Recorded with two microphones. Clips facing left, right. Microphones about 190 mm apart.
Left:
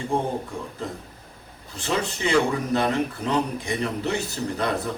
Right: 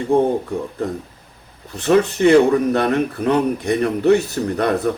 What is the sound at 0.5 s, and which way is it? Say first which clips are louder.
Speech: right 9 dB; 60° right (ahead or behind).